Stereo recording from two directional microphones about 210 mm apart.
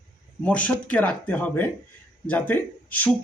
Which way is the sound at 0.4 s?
5° left (ahead or behind).